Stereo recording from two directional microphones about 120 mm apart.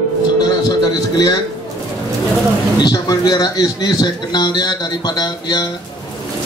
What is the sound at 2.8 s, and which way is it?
A man's voice, 35° left (ahead or behind).